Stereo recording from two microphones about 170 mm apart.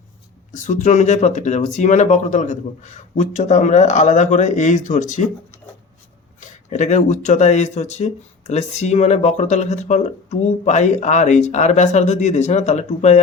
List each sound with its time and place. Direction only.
0.5 s speech: 45° left (ahead or behind)
6.7 s speech: 45° left (ahead or behind)